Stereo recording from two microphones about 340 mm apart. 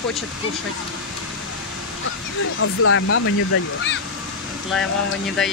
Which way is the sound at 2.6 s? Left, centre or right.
Left.